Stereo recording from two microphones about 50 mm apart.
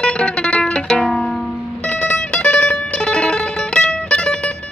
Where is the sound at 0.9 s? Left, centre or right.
Centre.